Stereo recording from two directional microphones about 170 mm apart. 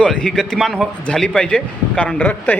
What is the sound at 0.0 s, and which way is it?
A man's voice, 5° left (ahead or behind).